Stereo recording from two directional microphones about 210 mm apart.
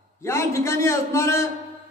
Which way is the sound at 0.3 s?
10° left (ahead or behind).